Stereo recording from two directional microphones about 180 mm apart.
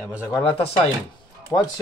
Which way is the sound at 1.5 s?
15° left (ahead or behind).